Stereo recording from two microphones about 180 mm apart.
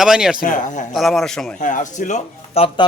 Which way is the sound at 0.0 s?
5° right (ahead or behind).